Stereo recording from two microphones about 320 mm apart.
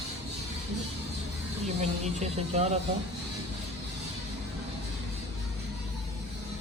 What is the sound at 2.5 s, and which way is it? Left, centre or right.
Speech, centre.